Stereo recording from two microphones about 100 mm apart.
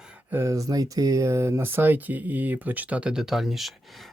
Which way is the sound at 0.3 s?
30° right (ahead or behind).